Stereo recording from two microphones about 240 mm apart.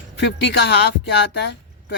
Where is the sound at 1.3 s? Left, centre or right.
Left.